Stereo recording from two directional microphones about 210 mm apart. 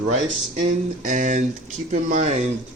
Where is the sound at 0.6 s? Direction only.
35° right (ahead or behind).